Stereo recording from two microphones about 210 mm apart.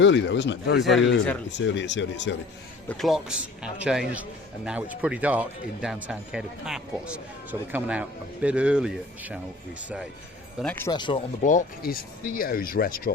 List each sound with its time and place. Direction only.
0.0 s speech: 60° left (ahead or behind)
0.8 s a man's voice: centre (ahead or behind)
1.5 s speech: 60° left (ahead or behind)
2.9 s a man's voice: centre (ahead or behind)
10.6 s speech: 5° left (ahead or behind)
10.9 s speech: 20° left (ahead or behind)
11.4 s speech: 40° left (ahead or behind)